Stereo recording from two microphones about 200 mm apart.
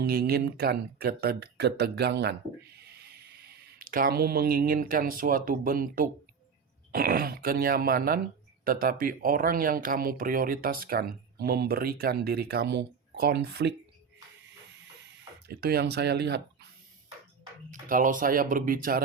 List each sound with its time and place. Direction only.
0.0 s speech: 50° right (ahead or behind)
3.8 s speech: 45° right (ahead or behind)
15.4 s speech: 50° right (ahead or behind)
17.7 s speech: 40° right (ahead or behind)